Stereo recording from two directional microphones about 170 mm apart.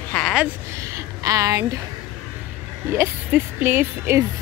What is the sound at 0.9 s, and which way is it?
Speech, 20° right (ahead or behind).